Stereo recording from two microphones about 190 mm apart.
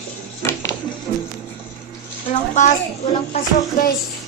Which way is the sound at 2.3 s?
40° left (ahead or behind).